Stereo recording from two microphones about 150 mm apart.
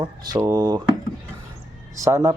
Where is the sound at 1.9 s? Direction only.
20° right (ahead or behind).